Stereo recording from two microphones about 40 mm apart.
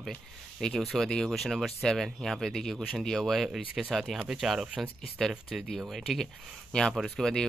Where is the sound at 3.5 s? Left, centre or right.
Right.